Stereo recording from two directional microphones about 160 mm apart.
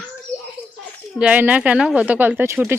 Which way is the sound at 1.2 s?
10° right (ahead or behind).